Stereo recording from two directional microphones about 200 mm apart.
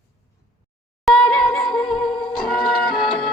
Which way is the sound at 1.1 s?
Centre (ahead or behind).